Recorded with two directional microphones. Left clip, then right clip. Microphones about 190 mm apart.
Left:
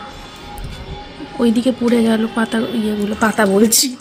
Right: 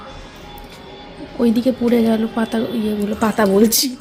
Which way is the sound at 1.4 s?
Centre (ahead or behind).